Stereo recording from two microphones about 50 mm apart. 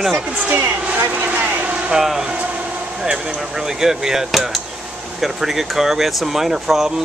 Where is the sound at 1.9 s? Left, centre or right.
Centre.